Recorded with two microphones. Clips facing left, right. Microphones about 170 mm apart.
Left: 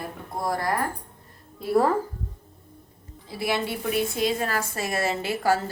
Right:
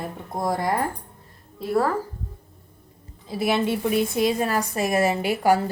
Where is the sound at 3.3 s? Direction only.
20° right (ahead or behind).